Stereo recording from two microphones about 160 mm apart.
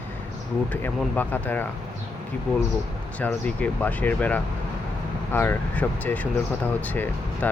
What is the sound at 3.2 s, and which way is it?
Speech, 10° left (ahead or behind).